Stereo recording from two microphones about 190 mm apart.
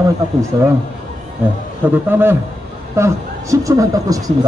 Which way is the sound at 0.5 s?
20° right (ahead or behind).